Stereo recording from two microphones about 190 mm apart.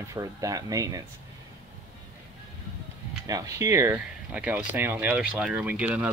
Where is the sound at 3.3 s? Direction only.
20° right (ahead or behind).